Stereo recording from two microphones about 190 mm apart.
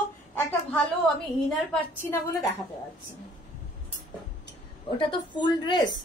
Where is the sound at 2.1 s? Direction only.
15° left (ahead or behind).